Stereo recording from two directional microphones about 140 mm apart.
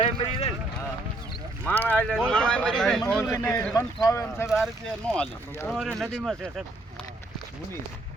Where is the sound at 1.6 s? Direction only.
10° left (ahead or behind).